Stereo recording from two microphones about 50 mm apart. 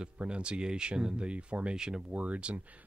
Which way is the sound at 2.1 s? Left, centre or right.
Right.